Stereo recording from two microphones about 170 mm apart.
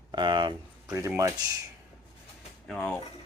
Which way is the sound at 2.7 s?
5° left (ahead or behind).